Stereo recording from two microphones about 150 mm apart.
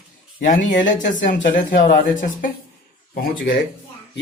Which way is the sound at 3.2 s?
80° left.